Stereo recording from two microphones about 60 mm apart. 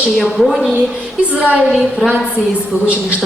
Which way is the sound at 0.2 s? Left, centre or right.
Centre.